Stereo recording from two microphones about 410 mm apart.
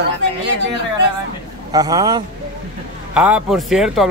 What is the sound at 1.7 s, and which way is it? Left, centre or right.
A man's voice, centre.